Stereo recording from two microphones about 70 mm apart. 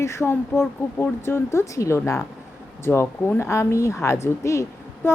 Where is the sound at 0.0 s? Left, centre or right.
Left.